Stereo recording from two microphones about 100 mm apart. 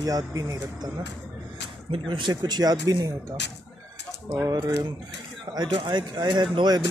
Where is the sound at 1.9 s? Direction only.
50° right (ahead or behind).